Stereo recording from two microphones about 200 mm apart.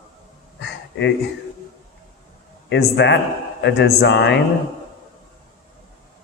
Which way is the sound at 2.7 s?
60° left (ahead or behind).